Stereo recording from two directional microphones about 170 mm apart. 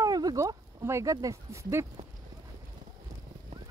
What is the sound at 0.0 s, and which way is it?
Speech, 20° right (ahead or behind).